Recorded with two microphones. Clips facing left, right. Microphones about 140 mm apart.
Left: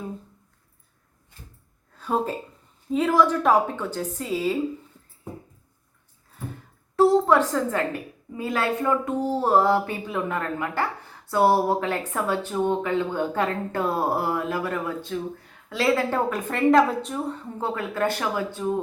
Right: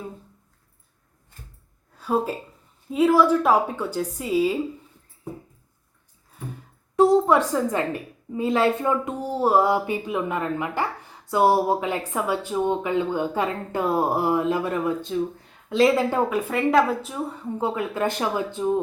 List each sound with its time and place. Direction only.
2.0 s speech: 10° right (ahead or behind)
6.9 s a sound: 15° right (ahead or behind)
8.3 s speech: 25° right (ahead or behind); by 17.3 s 5° right (ahead or behind)
17.6 s speech: 15° right (ahead or behind)